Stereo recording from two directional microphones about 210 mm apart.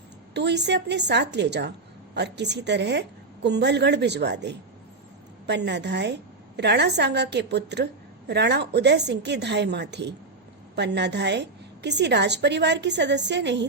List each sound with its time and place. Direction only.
0.3 s a woman's voice: 55° right (ahead or behind)